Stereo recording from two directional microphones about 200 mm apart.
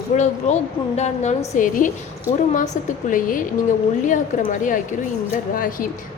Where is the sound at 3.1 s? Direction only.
40° left (ahead or behind).